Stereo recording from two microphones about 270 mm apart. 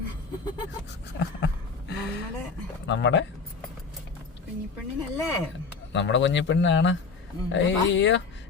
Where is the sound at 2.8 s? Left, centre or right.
Left.